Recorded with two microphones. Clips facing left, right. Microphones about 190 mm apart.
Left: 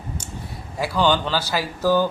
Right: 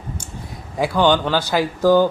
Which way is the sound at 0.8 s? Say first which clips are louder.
Right 4 dB; 15° right (ahead or behind).